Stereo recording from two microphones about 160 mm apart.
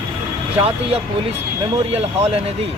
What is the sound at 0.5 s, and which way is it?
Speech, 35° right (ahead or behind).